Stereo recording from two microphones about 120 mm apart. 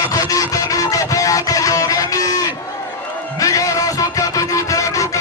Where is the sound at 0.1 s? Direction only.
30° left (ahead or behind).